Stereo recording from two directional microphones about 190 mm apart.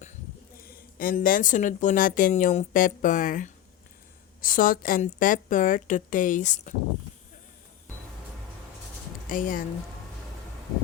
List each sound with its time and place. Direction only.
0.5 s speech: 50° left (ahead or behind)
9.3 s speech: 45° left (ahead or behind)